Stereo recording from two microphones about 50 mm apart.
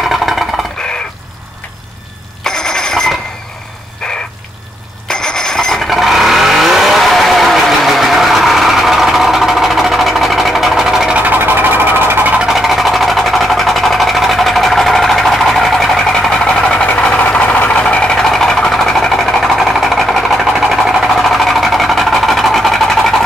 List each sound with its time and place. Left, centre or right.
0.0 s a sound: centre
2.4 s telephone bell ringing: centre
4.0 s crow: centre
5.0 s vehicle: centre
11.2 s sewing machine: right
12.4 s sewing machine: centre
16.7 s vehicle: centre
18.1 s sewing machine: centre